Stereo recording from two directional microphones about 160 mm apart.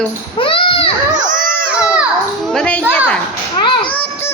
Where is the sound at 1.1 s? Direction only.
50° right (ahead or behind).